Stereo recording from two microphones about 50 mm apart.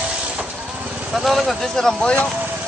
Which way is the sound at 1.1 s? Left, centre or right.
Centre.